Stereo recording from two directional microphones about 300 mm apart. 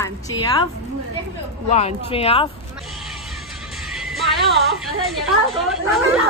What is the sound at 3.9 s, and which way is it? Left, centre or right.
Music, centre.